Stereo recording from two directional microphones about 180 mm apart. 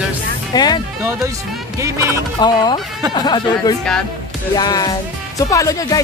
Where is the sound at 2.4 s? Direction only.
25° left (ahead or behind).